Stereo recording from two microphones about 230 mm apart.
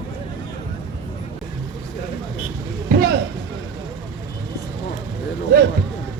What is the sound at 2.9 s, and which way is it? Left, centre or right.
Vehicle, right.